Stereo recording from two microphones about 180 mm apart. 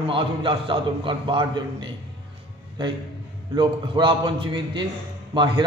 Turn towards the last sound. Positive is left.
turn(degrees=-25)  # may be behind; listen again after turning